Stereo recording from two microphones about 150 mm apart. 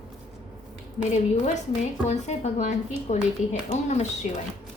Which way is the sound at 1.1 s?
50° left (ahead or behind).